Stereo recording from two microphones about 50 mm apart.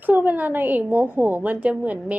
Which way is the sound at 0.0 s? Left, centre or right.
Right.